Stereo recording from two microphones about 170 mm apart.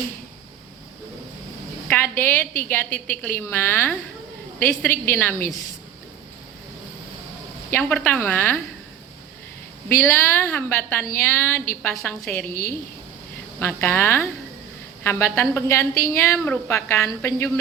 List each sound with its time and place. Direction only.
1.9 s a woman's voice: 10° left (ahead or behind)
7.7 s a woman's voice: 10° left (ahead or behind)
10.0 s a woman's voice: 10° left (ahead or behind)